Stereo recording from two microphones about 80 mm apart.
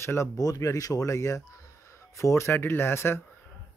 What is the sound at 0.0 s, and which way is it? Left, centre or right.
Speech, left.